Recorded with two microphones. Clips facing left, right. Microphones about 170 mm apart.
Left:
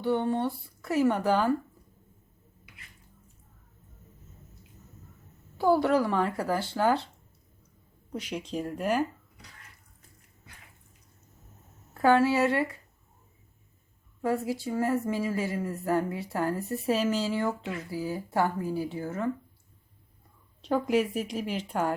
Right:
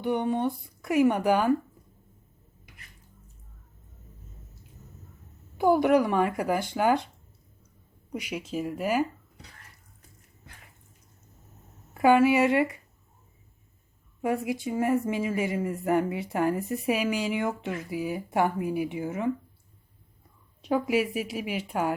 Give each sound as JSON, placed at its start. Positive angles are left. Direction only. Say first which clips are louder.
{"t": 0.0, "sound": "speech", "louder": "right 1 dB", "side_deg": -15}
{"t": 5.5, "sound": "speech", "louder": "right 2 dB", "side_deg": -15}
{"t": 8.1, "sound": "speech", "louder": "right 1 dB", "side_deg": -10}
{"t": 11.9, "sound": "speech", "louder": "right 2 dB", "side_deg": -15}
{"t": 14.2, "sound": "speech", "louder": "right 1 dB", "side_deg": -20}
{"t": 20.6, "sound": "speech", "louder": "even", "side_deg": -10}